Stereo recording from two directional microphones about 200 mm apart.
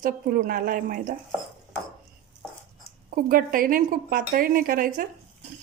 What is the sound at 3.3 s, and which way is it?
A woman's voice, 45° right (ahead or behind).